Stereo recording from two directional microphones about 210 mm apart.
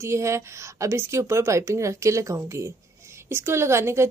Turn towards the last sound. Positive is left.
turn(degrees=-15)  # may be behind; listen again after turning